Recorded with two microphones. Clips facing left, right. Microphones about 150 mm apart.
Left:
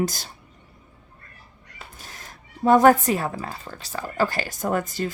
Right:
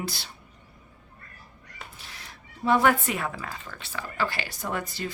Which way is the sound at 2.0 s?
45° left (ahead or behind).